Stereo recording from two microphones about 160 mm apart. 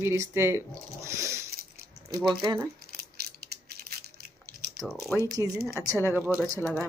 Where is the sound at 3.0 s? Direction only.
80° right.